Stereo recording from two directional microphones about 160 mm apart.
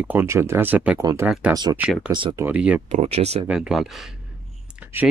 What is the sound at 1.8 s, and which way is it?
Speech, 5° right (ahead or behind).